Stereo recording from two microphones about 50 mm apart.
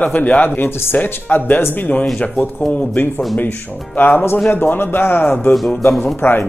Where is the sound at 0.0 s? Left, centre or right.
Left.